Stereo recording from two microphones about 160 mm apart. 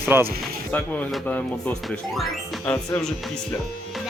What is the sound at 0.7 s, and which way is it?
Speech, 10° left (ahead or behind).